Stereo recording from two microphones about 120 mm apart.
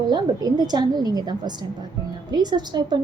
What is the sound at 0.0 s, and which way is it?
A woman's voice, 35° right (ahead or behind).